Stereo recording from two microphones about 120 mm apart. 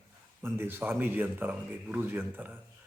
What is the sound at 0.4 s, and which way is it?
A man's voice, 20° right (ahead or behind).